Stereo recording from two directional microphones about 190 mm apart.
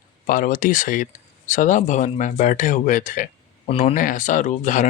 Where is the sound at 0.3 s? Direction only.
45° left (ahead or behind).